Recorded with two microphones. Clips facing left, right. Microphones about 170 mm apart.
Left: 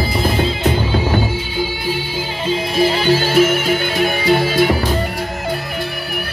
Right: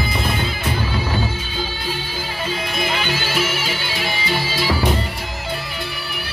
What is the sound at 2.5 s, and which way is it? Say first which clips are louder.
Music: left 9 dB; 35° left (ahead or behind).